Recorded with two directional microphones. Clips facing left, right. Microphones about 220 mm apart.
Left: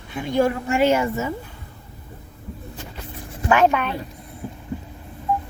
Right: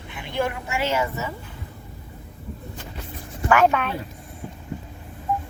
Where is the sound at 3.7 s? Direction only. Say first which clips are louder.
Left 1 dB; centre (ahead or behind).